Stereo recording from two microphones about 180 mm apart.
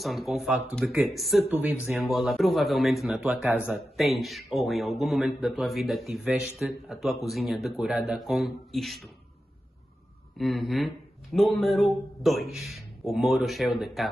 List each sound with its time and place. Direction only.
0.0 s a man's voice: centre (ahead or behind)
10.3 s a man's voice: centre (ahead or behind)